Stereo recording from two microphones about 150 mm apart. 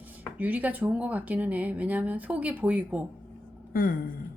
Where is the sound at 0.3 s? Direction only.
10° right (ahead or behind).